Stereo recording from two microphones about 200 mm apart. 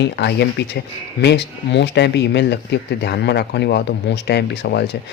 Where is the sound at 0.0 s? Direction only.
60° left (ahead or behind).